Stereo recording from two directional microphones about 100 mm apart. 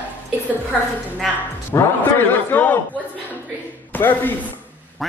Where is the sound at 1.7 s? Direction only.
20° left (ahead or behind).